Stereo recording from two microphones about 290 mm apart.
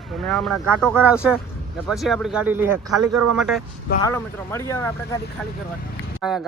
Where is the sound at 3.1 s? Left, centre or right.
Right.